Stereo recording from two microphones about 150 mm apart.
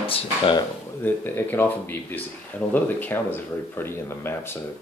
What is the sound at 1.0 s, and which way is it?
Speech, 15° left (ahead or behind).